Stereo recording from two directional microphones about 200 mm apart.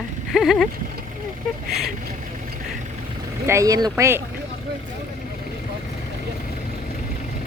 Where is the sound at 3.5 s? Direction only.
15° right (ahead or behind).